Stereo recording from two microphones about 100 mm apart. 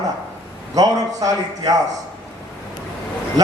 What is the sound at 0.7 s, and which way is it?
A man's voice, 35° right (ahead or behind).